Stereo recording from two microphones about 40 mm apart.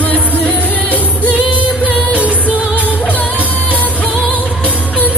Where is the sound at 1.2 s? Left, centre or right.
Right.